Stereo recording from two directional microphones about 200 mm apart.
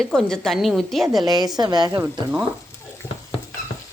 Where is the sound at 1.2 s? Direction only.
20° right (ahead or behind).